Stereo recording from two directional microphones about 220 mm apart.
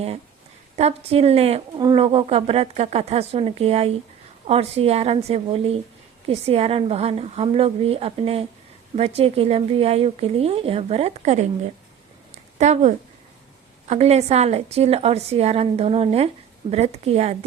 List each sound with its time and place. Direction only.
0.8 s speech: 30° right (ahead or behind)
12.3 s a sound: 30° right (ahead or behind)
13.8 s speech: 30° right (ahead or behind)